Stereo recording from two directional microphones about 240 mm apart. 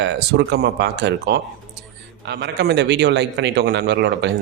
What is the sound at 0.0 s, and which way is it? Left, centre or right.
Speech, right.